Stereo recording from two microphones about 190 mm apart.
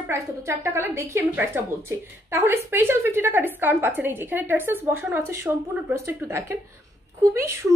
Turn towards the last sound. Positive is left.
turn(degrees=-15)  # may be behind; listen again after turning